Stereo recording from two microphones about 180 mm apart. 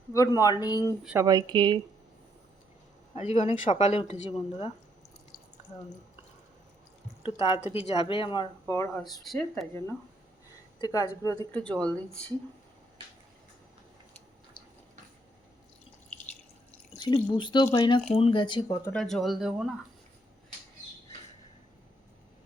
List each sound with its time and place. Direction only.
0.1 s speech: 20° left (ahead or behind)
1.2 s a woman's voice: 20° right (ahead or behind)
3.2 s a woman's voice: 40° left (ahead or behind)
7.2 s a woman's voice: 35° left (ahead or behind); by 9.0 s 15° left (ahead or behind)
9.0 s speech: centre (ahead or behind)
10.8 s speech: 20° left (ahead or behind)
16.9 s speech: 25° left (ahead or behind)
18.9 s speech: 5° left (ahead or behind)